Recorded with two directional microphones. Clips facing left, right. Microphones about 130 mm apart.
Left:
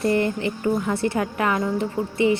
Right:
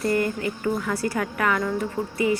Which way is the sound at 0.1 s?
25° left (ahead or behind).